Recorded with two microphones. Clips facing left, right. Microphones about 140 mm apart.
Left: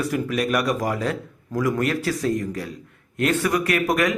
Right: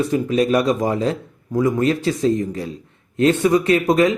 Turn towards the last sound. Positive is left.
turn(degrees=-25)  # may be behind; listen again after turning